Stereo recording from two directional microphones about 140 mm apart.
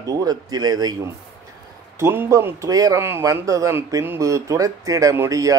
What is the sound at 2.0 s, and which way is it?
Speech, 20° right (ahead or behind).